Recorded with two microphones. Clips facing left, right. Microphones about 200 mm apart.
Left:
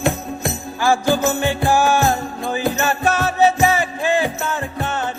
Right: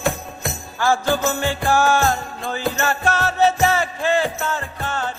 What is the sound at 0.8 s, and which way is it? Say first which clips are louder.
Music: left 2 dB; 15° left (ahead or behind).